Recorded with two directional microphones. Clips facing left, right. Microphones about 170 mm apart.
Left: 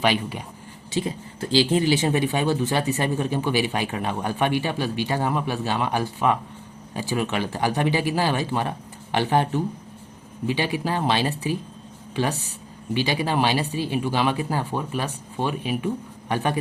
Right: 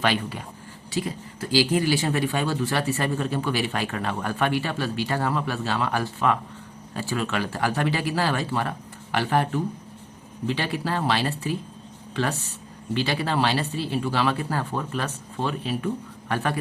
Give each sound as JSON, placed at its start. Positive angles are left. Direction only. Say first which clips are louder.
{"t": 0.0, "sound": "speech", "louder": "left 2 dB", "side_deg": 15}
{"t": 12.9, "sound": "speech", "louder": "left 2 dB", "side_deg": 15}